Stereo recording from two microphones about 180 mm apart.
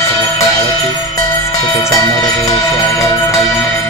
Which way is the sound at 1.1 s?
20° left (ahead or behind).